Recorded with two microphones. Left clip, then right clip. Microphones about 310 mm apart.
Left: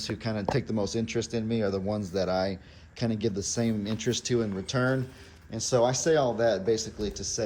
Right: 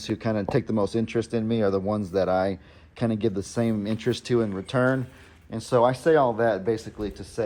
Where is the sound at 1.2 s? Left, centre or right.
Right.